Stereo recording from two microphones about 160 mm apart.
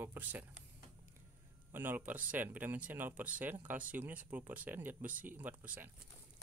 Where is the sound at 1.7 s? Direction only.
10° right (ahead or behind).